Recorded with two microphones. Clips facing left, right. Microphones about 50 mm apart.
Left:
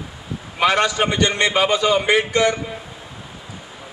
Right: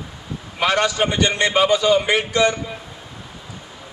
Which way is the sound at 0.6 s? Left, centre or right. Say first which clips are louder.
Left 1 dB; centre.